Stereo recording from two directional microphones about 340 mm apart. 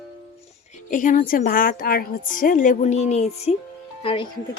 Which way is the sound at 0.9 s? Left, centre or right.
Left.